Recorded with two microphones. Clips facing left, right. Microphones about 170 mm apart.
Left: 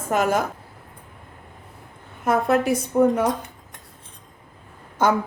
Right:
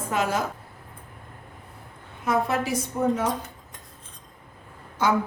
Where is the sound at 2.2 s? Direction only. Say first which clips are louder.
Left 5 dB; 55° left (ahead or behind).